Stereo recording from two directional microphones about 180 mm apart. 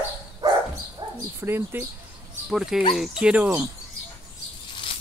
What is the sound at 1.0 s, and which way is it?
Dog, 30° right (ahead or behind).